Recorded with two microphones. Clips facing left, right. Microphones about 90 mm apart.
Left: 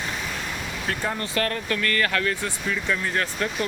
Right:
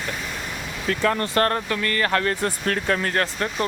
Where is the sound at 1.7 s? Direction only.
25° right (ahead or behind); by 2.5 s 40° right (ahead or behind).